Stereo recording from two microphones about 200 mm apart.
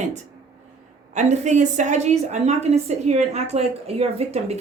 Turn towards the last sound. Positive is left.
turn(degrees=-30)  # may be behind; listen again after turning